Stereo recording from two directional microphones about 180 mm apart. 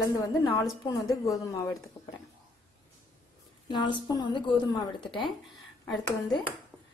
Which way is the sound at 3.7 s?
25° left (ahead or behind).